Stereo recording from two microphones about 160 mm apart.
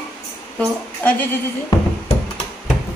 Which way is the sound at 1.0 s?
10° left (ahead or behind).